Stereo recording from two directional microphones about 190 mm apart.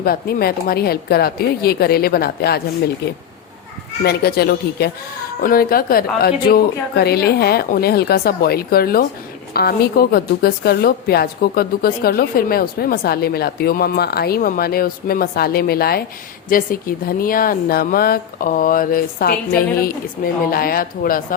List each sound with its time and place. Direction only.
0.0 s a woman's voice: 50° left (ahead or behind)
4.0 s a woman's voice: 55° left (ahead or behind)